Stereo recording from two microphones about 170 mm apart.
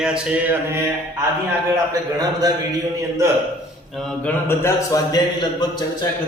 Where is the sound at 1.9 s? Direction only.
20° right (ahead or behind).